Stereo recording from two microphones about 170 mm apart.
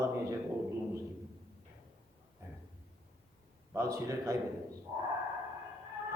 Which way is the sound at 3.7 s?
20° right (ahead or behind).